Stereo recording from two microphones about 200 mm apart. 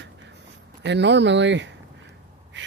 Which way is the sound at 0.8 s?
60° right (ahead or behind).